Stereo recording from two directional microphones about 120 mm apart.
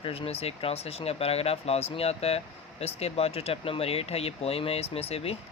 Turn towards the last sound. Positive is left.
turn(degrees=55)  # may be behind; listen again after turning